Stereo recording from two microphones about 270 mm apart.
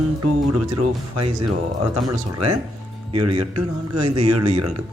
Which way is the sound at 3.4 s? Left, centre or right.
Right.